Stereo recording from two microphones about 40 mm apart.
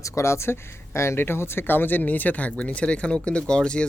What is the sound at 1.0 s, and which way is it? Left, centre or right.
Speech, left.